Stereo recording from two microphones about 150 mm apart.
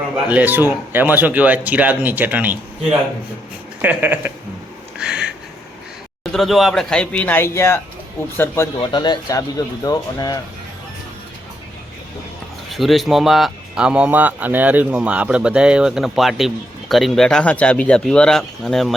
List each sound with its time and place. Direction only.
0.3 s speech: 10° right (ahead or behind)
3.8 s speech: 10° right (ahead or behind)
4.9 s a sound: 5° right (ahead or behind)
6.3 s speech: centre (ahead or behind)
8.8 s speech: 30° left (ahead or behind)
12.7 s speech: centre (ahead or behind)